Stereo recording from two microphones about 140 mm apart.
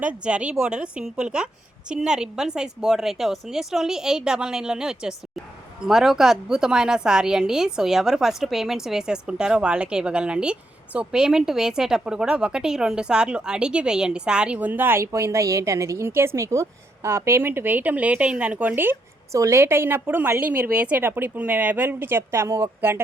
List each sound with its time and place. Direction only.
0.0 s a woman's voice: 10° right (ahead or behind)